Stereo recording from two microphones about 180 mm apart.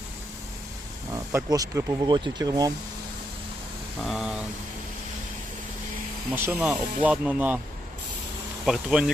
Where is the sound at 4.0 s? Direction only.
Centre (ahead or behind).